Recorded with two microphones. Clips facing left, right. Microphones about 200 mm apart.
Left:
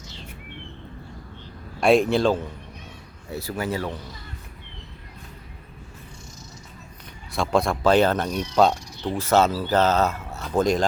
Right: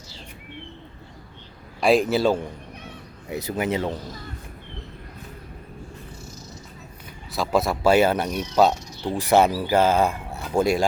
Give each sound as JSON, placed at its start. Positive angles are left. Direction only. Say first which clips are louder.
{"t": 1.8, "sound": "speech", "louder": "left 1 dB", "side_deg": 0}
{"t": 7.3, "sound": "speech", "louder": "even", "side_deg": -5}